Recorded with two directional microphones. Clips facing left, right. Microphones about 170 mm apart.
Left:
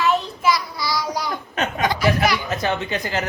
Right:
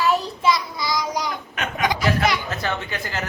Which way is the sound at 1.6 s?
30° left (ahead or behind).